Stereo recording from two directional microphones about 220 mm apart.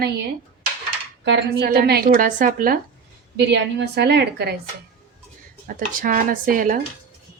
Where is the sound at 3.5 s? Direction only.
50° right (ahead or behind).